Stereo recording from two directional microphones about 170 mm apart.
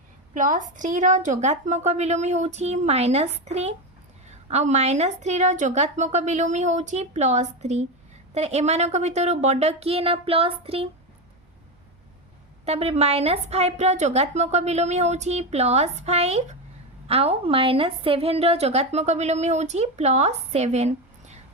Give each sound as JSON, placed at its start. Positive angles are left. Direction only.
{"t": 0.3, "sound": "a woman's voice", "side_deg": -50}
{"t": 12.6, "sound": "a woman's voice", "side_deg": -40}